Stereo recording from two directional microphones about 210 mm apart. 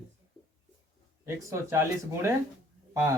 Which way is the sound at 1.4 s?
15° right (ahead or behind).